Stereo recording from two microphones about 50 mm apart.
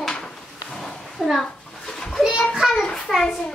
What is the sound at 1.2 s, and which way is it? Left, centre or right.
Speech, centre.